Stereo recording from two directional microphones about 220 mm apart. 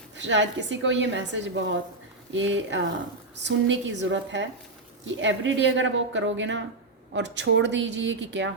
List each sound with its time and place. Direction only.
0.2 s speech: 55° right (ahead or behind)